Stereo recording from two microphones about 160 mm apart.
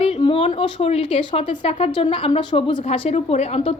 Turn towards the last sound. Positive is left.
turn(degrees=40)  # may be behind; listen again after turning